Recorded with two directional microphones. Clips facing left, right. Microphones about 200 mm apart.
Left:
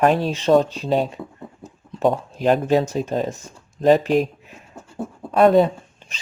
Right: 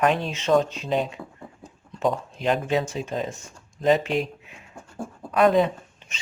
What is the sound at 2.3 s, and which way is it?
Speech, 45° left (ahead or behind).